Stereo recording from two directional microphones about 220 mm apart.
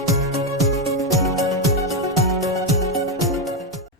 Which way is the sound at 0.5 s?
Centre (ahead or behind).